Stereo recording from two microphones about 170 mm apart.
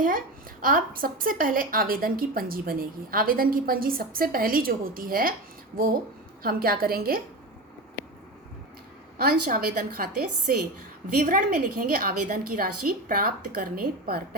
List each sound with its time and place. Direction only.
0.6 s a woman's voice: 55° right (ahead or behind)
6.4 s a woman's voice: 60° right (ahead or behind)
9.1 s a woman's voice: 65° right (ahead or behind)